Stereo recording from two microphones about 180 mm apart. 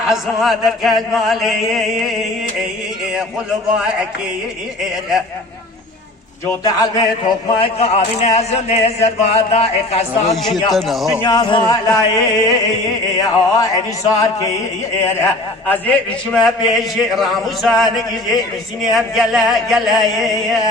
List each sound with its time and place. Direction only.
0.1 s a man's voice: centre (ahead or behind)
6.5 s a man's voice: 20° left (ahead or behind); by 10.3 s 35° left (ahead or behind)
10.8 s a man's voice: centre (ahead or behind)
11.2 s chant: 20° left (ahead or behind)
15.2 s a man's voice: 10° left (ahead or behind)